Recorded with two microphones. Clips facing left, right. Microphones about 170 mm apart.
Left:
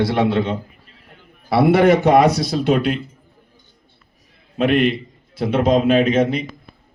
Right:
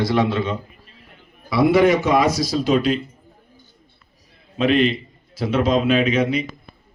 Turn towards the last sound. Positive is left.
turn(degrees=50)  # may be behind; listen again after turning